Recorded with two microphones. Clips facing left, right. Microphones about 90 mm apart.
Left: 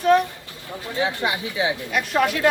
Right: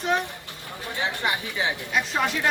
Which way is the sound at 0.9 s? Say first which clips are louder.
Left 4 dB; 20° left (ahead or behind).